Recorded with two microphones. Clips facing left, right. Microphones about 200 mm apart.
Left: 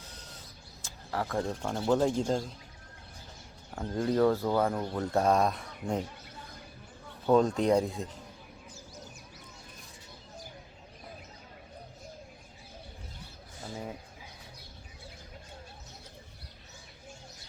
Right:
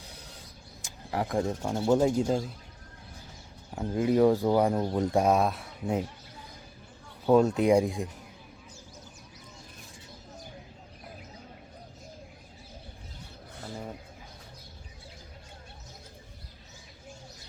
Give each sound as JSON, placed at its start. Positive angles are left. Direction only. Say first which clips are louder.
{"t": 0.8, "sound": "speech", "louder": "right 3 dB", "side_deg": -15}
{"t": 3.8, "sound": "speech", "louder": "right 3 dB", "side_deg": -10}
{"t": 7.3, "sound": "speech", "louder": "right 3 dB", "side_deg": -5}